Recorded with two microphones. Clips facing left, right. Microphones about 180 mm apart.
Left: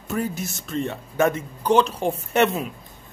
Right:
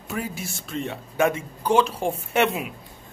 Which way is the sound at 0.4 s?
45° left (ahead or behind).